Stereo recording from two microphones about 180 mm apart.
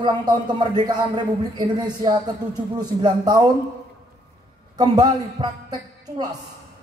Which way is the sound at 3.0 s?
25° right (ahead or behind).